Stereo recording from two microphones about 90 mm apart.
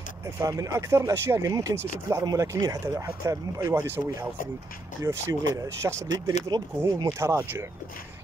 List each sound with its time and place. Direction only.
0.4 s speech: 35° right (ahead or behind)
1.5 s speech: 40° right (ahead or behind)
5.0 s speech: 35° right (ahead or behind)